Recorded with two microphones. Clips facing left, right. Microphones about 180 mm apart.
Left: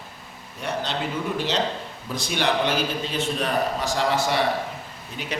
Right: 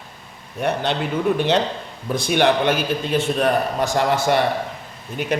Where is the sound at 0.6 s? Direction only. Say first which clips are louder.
Right 7 dB; 60° right (ahead or behind).